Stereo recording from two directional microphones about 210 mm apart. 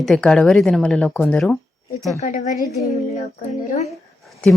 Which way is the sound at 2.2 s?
35° left (ahead or behind).